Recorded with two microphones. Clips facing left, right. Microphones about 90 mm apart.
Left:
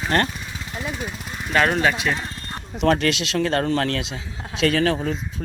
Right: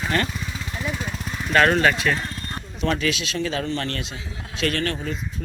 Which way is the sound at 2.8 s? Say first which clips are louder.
Left 4 dB; 70° left (ahead or behind).